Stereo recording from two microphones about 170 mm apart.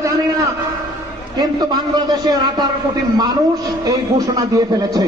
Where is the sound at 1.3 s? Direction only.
25° right (ahead or behind).